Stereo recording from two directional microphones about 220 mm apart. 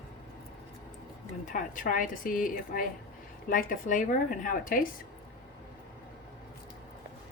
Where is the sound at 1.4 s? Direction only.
35° left (ahead or behind).